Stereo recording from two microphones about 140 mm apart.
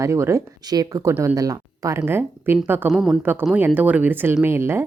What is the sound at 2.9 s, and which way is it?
Speech, centre (ahead or behind).